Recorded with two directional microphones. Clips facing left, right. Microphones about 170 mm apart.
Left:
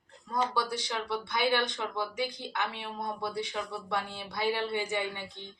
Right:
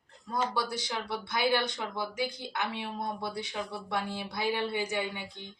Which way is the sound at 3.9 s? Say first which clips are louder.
Right 1 dB; 15° right (ahead or behind).